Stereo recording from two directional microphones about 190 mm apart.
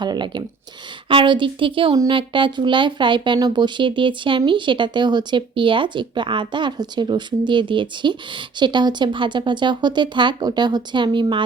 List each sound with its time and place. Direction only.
0.0 s speech: 25° right (ahead or behind)